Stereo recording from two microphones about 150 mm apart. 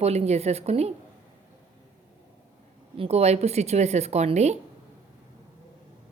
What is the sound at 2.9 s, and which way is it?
Speech, 45° right (ahead or behind).